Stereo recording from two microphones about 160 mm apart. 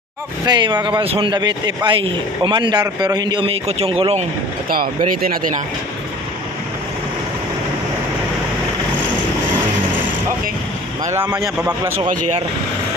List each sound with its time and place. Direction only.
0.5 s speech: 30° right (ahead or behind)
4.6 s speech: 70° right (ahead or behind)
11.1 s speech: 15° right (ahead or behind)